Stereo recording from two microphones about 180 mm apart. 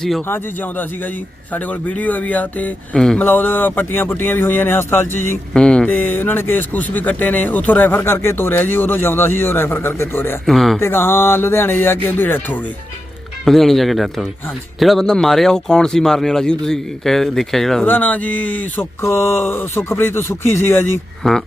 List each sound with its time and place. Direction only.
1.5 s speech: 10° left (ahead or behind)
10.4 s a man's voice: centre (ahead or behind)
10.8 s a man's voice: 15° left (ahead or behind)
21.2 s a man's voice: centre (ahead or behind)